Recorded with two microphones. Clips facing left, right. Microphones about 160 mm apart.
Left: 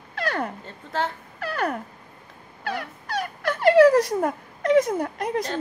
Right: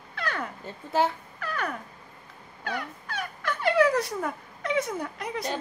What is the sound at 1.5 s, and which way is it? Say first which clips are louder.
Dog: left 6 dB; 45° left (ahead or behind).